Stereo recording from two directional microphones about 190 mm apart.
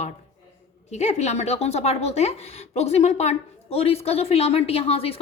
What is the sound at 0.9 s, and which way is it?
Speech, 35° left (ahead or behind).